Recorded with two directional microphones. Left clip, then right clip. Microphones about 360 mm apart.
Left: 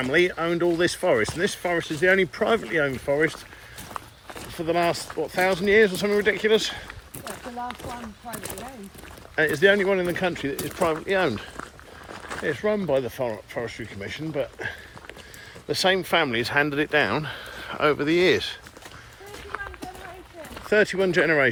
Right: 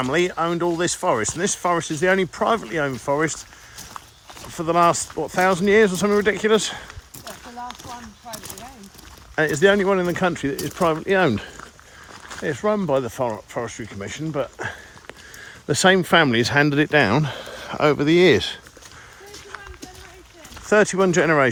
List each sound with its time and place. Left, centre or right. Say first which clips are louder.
0.0 s speech: right 1 dB; centre
4.5 s speech: right 6 dB; right
9.3 s speech: right 2 dB; centre
12.5 s speech: right 3 dB; centre
20.9 s speech: right 3 dB; centre